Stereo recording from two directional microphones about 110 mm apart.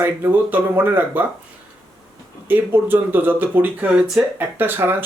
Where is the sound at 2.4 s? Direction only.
20° right (ahead or behind).